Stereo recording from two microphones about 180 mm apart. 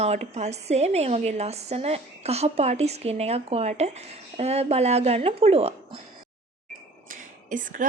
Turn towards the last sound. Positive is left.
turn(degrees=-50)  # may be behind; listen again after turning